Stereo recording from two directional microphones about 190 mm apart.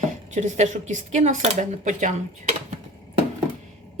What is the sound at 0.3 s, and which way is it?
Speech, 40° right (ahead or behind).